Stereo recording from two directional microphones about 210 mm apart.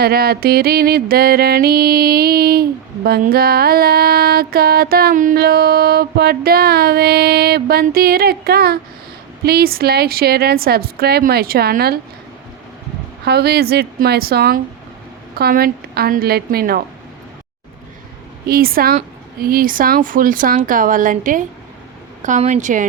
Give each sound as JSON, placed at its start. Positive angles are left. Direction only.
{"t": 0.0, "sound": "music", "side_deg": -45}
{"t": 13.2, "sound": "music", "side_deg": -50}
{"t": 18.4, "sound": "music", "side_deg": -45}
{"t": 19.4, "sound": "speech", "side_deg": -45}